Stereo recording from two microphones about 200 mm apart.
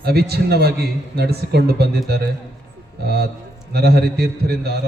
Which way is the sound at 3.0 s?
55° right (ahead or behind).